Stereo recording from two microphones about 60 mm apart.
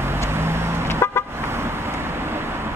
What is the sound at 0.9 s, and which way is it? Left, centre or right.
Vehicle horn, left.